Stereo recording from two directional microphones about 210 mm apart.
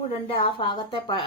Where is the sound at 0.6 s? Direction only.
20° left (ahead or behind).